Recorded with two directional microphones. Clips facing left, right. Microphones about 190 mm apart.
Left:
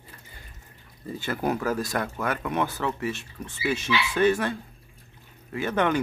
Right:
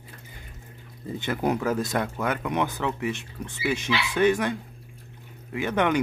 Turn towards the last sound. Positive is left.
turn(degrees=-15)  # may be behind; listen again after turning